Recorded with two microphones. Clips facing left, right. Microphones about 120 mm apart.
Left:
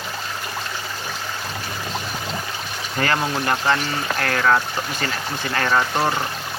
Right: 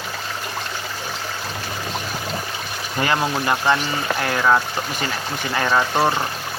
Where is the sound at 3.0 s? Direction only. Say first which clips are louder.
Right 1 dB; 15° right (ahead or behind).